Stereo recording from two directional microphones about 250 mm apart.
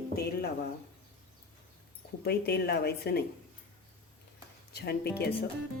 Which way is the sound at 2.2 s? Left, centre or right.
Left.